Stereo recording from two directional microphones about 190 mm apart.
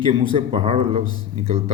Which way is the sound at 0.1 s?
25° right (ahead or behind).